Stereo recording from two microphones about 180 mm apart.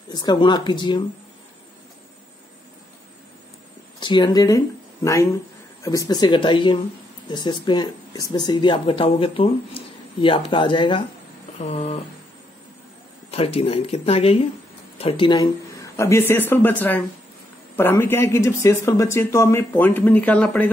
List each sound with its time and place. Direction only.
0.1 s speech: 25° left (ahead or behind)
4.0 s speech: 25° left (ahead or behind)
13.3 s speech: 35° left (ahead or behind); by 20.7 s 10° left (ahead or behind)